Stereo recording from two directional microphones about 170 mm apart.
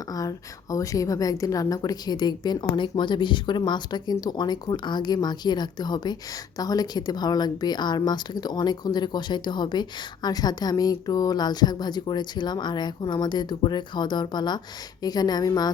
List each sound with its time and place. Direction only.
0.2 s speech: 20° left (ahead or behind)